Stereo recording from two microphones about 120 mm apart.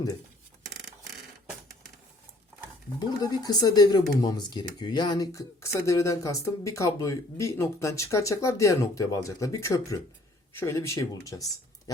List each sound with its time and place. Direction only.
3.0 s speech: 35° left (ahead or behind)